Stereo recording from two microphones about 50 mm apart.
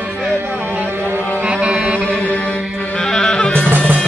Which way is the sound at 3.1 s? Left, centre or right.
Centre.